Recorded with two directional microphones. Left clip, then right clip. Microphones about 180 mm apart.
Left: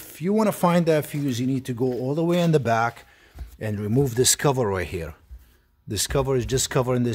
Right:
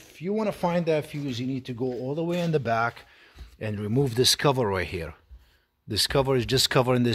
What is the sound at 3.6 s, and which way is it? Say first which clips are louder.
Speech: left 3 dB; centre (ahead or behind).